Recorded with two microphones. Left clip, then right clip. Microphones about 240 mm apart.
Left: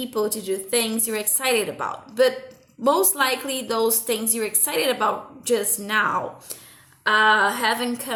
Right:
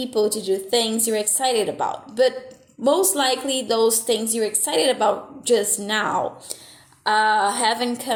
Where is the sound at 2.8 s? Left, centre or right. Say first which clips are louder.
Right 1 dB; centre.